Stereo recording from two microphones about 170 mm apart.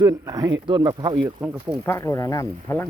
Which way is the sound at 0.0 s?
20° right (ahead or behind).